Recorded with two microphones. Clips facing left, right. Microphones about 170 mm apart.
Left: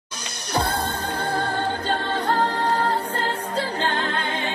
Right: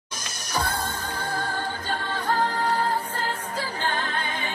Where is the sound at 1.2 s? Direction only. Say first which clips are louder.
Left 5 dB; 65° left (ahead or behind).